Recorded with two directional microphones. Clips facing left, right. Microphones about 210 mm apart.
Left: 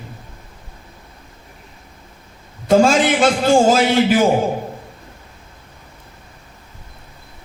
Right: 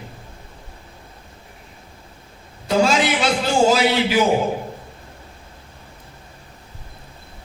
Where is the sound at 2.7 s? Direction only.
50° left (ahead or behind).